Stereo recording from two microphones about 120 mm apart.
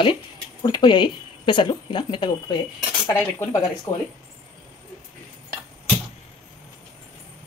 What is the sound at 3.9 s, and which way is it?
Speech, 15° left (ahead or behind).